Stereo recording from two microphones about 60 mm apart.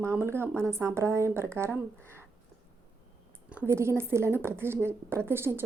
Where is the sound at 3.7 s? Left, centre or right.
Right.